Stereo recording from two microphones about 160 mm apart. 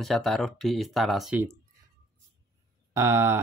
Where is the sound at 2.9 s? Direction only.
15° right (ahead or behind).